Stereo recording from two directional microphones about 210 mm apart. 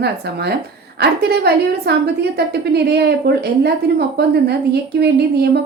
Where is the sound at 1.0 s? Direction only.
50° right (ahead or behind).